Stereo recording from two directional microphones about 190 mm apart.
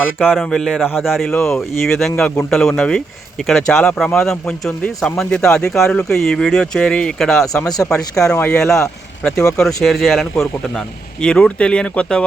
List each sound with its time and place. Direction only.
0.2 s speech: centre (ahead or behind)
7.6 s speech: 20° left (ahead or behind)
7.9 s speech: 5° left (ahead or behind)